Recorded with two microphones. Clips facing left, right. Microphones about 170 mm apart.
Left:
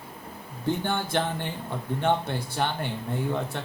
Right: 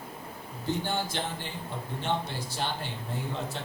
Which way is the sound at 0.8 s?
55° left (ahead or behind).